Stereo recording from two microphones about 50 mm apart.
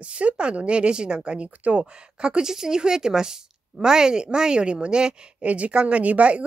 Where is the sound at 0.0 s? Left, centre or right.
Right.